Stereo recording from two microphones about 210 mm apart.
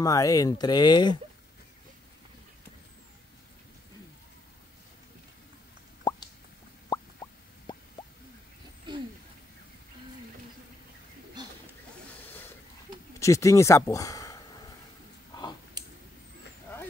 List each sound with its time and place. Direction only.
0.0 s speech: 15° left (ahead or behind)
6.1 s plop: 20° left (ahead or behind)
13.2 s speech: 15° left (ahead or behind)